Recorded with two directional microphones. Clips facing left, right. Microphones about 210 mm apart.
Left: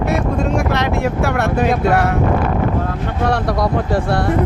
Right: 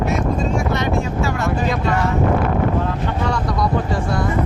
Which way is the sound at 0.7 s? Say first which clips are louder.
Left 2 dB; 70° left (ahead or behind).